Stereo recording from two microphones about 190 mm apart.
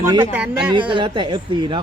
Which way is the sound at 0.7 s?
25° right (ahead or behind).